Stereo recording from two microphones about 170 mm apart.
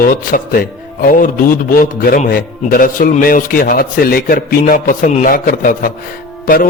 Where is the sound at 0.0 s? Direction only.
55° left (ahead or behind).